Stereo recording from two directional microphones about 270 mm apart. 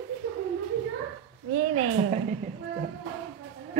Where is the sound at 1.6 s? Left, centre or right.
Right.